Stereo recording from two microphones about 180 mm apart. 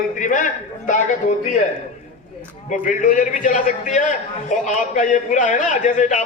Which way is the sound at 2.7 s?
45° left (ahead or behind).